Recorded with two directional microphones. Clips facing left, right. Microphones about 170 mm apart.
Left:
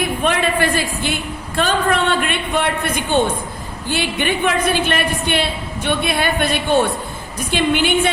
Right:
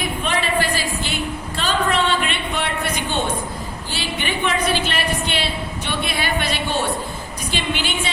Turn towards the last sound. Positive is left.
turn(degrees=55)  # may be behind; listen again after turning